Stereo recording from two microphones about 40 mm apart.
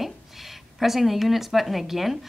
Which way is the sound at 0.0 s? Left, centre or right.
Centre.